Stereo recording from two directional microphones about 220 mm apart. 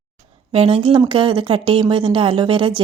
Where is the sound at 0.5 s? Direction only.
25° right (ahead or behind).